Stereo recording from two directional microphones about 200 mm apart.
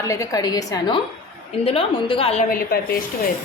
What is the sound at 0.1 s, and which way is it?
A woman's voice, 15° left (ahead or behind).